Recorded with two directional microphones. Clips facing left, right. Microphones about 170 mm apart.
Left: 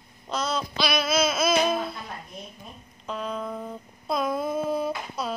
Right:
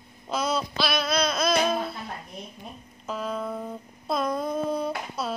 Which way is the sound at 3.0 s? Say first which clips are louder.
Right 1 dB; 5° right (ahead or behind).